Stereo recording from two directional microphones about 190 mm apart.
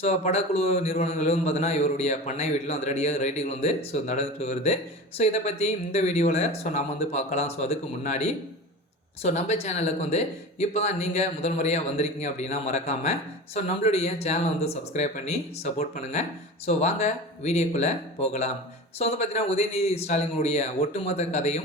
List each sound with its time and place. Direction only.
0.0 s a man's voice: 35° left (ahead or behind)